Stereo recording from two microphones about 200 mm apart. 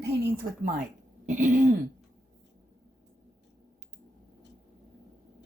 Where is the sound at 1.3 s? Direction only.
40° right (ahead or behind).